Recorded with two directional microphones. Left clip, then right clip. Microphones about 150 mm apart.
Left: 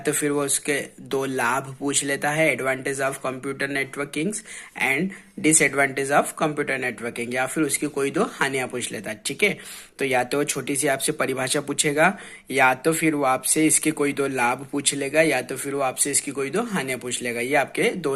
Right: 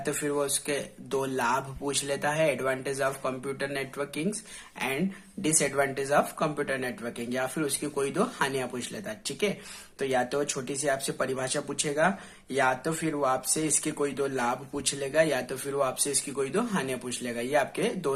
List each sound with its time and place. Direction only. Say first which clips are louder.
0.0 s speech: left 5 dB; 30° left (ahead or behind)
5.5 s speech: left 7 dB; 30° left (ahead or behind)
6.1 s speech: left 4 dB; 20° left (ahead or behind)
7.5 s speech: left 6 dB; 20° left (ahead or behind)
15.6 s speech: left 4 dB; 15° left (ahead or behind)